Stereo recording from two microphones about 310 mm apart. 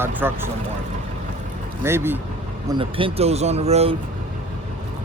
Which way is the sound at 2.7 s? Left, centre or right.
Centre.